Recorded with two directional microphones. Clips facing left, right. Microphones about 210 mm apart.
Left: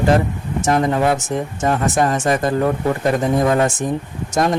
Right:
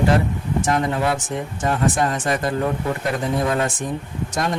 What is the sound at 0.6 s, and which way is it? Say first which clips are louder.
Speech: left 6 dB; 45° left (ahead or behind).